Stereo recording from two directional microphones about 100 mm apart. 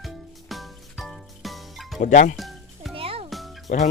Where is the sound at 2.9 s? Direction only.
70° right (ahead or behind).